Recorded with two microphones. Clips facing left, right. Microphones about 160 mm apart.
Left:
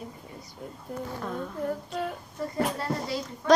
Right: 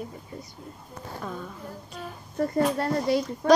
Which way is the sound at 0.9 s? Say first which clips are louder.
Left 11 dB; 80° left.